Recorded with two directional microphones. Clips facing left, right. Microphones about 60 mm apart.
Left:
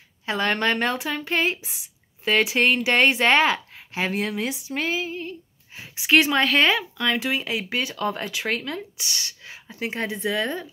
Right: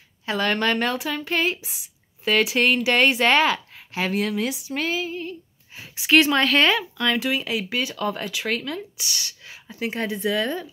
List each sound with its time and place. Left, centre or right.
0.2 s a woman's voice: left
6.0 s speech: centre
7.2 s speech: left